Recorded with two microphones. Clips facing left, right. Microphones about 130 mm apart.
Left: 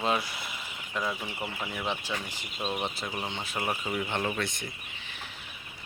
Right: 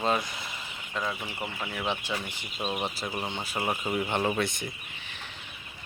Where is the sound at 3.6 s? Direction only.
15° right (ahead or behind).